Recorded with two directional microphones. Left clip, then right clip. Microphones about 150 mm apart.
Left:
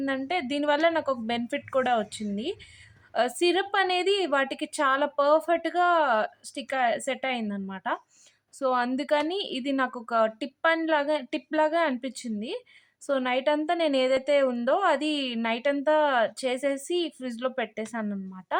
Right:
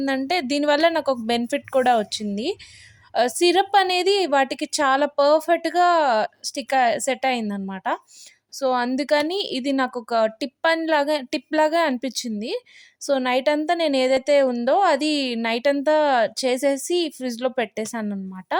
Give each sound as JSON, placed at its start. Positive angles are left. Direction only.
{"t": 0.3, "sound": "a woman's voice", "side_deg": -45}